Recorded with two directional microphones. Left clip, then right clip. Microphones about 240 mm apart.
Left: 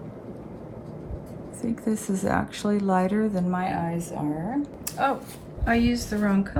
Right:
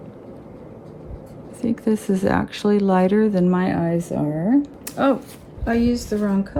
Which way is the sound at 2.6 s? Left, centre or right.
Left.